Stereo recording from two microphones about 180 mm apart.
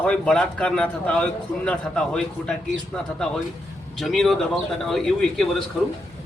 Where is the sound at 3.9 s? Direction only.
Centre (ahead or behind).